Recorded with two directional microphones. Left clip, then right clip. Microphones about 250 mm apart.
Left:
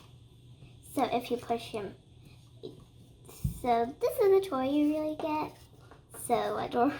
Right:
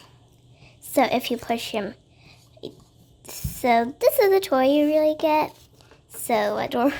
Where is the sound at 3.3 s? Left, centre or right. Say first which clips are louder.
Right 9 dB; right.